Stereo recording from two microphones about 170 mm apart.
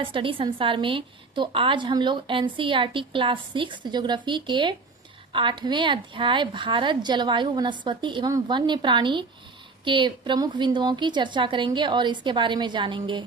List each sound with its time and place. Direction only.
0.0 s a woman's voice: 30° right (ahead or behind)